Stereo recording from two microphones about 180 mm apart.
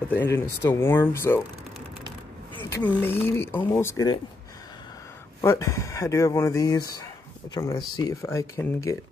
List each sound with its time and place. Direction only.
0.1 s speech: 10° left (ahead or behind)
2.5 s a sound: 10° left (ahead or behind)
3.0 s speech: 10° left (ahead or behind)
5.4 s speech: 15° left (ahead or behind)